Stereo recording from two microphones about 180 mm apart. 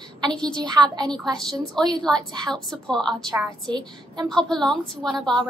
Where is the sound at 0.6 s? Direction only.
25° right (ahead or behind).